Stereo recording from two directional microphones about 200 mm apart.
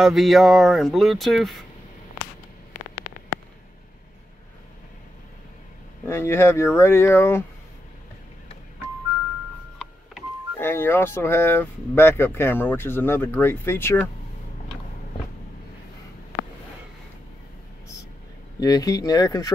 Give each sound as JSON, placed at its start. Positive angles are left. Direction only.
{"t": 0.0, "sound": "speech", "side_deg": 0}
{"t": 6.0, "sound": "speech", "side_deg": 10}
{"t": 10.6, "sound": "speech", "side_deg": 10}
{"t": 18.6, "sound": "speech", "side_deg": 15}